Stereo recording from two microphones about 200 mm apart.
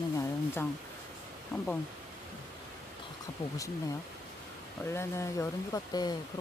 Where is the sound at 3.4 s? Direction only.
30° left (ahead or behind).